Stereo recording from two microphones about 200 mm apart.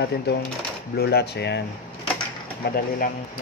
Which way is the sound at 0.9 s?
55° left (ahead or behind).